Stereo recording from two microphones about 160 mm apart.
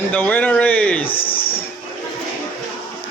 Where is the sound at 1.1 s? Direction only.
35° left (ahead or behind).